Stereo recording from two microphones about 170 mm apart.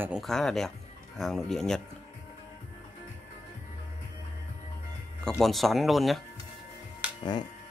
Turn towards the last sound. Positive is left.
turn(degrees=25)  # may be behind; listen again after turning